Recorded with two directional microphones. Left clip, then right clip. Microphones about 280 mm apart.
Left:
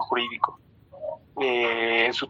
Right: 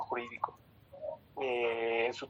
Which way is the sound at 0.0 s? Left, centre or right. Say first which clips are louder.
Left 12 dB; left.